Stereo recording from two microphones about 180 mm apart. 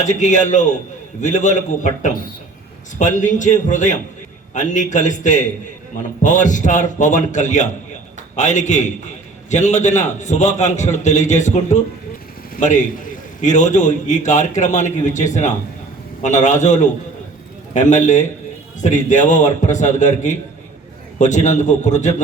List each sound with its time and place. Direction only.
0.0 s a man's voice: 40° left (ahead or behind)